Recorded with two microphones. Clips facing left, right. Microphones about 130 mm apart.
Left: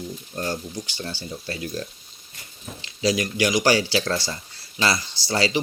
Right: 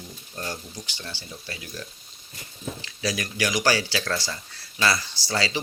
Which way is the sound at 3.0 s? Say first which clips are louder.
Left 7 dB; 25° left (ahead or behind).